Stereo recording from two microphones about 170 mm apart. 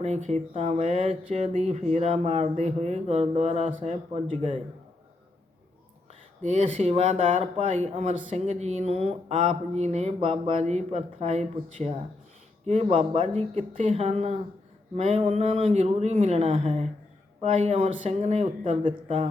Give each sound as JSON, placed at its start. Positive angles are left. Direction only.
{"t": 0.0, "sound": "speech", "side_deg": -40}
{"t": 6.4, "sound": "speech", "side_deg": -40}